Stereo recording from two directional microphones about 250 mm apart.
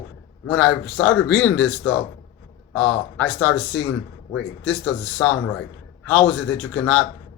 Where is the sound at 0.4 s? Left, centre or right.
Centre.